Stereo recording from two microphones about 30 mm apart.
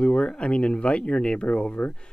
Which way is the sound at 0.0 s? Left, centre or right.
Left.